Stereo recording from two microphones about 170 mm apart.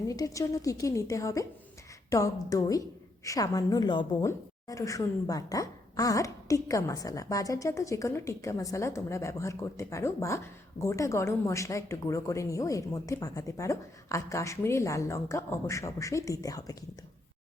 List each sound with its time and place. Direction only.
0.1 s a woman's voice: 20° left (ahead or behind)